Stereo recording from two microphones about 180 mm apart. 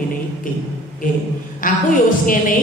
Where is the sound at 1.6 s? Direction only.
50° left (ahead or behind).